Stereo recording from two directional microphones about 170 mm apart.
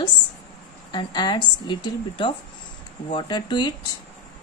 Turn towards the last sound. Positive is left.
turn(degrees=25)  # may be behind; listen again after turning